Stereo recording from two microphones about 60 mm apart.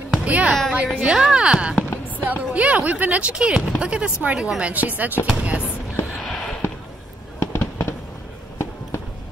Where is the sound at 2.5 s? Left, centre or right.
Right.